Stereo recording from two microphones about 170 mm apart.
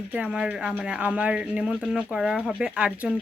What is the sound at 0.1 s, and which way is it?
Speech, 5° right (ahead or behind).